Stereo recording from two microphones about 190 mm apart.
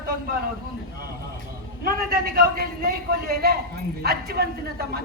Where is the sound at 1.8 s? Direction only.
50° right (ahead or behind).